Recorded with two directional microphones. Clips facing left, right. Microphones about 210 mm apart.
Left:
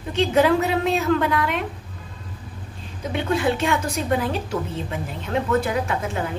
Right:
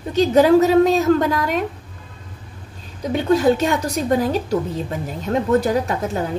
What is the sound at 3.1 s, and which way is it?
A woman's voice, 40° right (ahead or behind).